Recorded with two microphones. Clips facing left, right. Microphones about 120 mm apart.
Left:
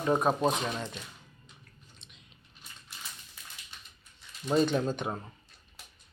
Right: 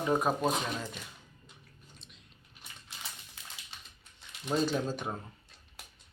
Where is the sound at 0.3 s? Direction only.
25° left (ahead or behind).